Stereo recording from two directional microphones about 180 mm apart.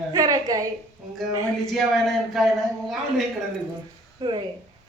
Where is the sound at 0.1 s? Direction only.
20° right (ahead or behind).